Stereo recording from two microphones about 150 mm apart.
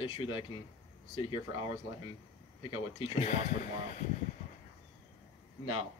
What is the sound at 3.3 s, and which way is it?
Speech, 55° left (ahead or behind).